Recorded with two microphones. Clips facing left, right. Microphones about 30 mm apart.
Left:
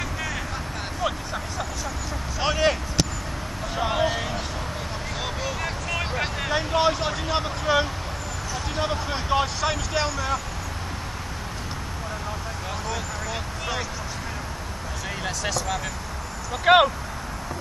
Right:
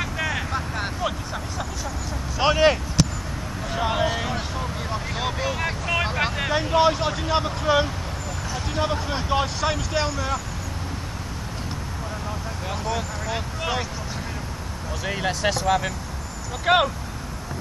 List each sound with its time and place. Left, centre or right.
0.0 s vehicle: centre
1.0 s vehicle: centre
2.3 s a sound: centre
3.7 s a sound: centre
6.5 s vehicle: centre
8.7 s speech: centre
12.8 s speech: centre
15.0 s speech: centre
16.6 s speech: centre